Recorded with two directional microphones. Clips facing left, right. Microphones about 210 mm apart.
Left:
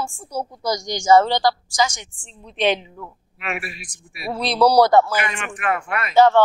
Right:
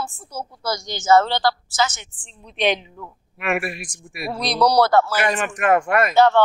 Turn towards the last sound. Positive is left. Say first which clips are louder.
# left 1 dB
turn(degrees=10)  # may be behind; listen again after turning